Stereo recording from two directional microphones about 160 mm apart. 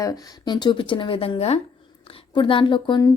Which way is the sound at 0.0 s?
25° left (ahead or behind).